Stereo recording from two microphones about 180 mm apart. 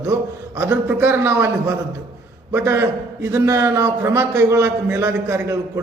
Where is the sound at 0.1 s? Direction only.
15° right (ahead or behind).